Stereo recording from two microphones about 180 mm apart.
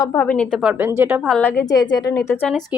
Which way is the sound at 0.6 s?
10° right (ahead or behind).